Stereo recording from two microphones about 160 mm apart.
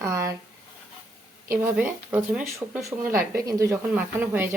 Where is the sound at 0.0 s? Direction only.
20° right (ahead or behind).